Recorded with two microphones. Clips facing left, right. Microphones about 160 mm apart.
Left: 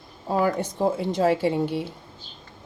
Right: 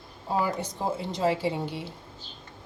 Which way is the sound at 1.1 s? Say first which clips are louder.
Left 4 dB; 55° left (ahead or behind).